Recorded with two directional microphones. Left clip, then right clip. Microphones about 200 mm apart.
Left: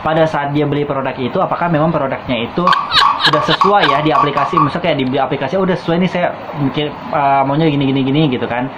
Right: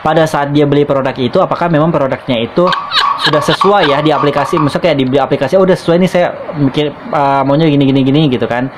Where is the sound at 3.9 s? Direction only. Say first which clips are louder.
Right 2 dB; 55° right (ahead or behind).